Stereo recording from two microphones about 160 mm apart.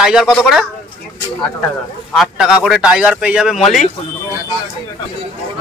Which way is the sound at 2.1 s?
5° right (ahead or behind).